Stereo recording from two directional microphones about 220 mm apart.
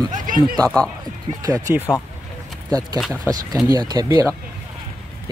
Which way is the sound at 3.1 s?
15° right (ahead or behind).